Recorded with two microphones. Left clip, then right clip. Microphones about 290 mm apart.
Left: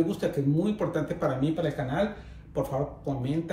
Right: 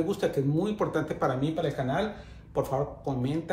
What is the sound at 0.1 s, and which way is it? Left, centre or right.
Speech, centre.